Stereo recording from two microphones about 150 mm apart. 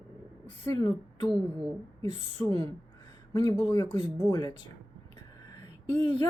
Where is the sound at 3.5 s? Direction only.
20° left (ahead or behind).